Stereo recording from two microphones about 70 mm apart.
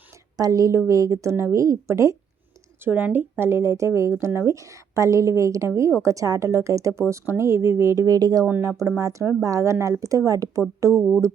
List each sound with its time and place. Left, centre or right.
0.3 s a woman's voice: right
2.8 s a woman's voice: right
8.0 s speech: right
9.0 s a woman's voice: right